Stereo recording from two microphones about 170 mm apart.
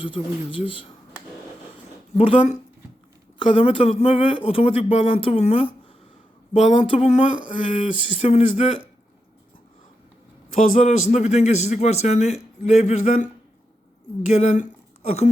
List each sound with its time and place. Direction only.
0.0 s a man's voice: 30° left (ahead or behind)
2.1 s a man's voice: 30° left (ahead or behind)
10.6 s a man's voice: 40° left (ahead or behind)